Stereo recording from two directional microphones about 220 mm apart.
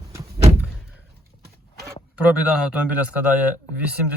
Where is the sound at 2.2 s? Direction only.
5° right (ahead or behind).